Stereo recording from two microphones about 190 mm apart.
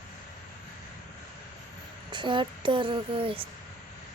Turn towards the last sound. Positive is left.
turn(degrees=-30)  # may be behind; listen again after turning